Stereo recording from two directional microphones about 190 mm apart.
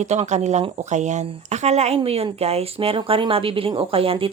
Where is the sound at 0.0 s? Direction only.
35° right (ahead or behind).